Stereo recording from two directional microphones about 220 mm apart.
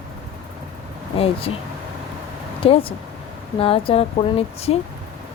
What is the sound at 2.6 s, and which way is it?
Speech, 25° left (ahead or behind).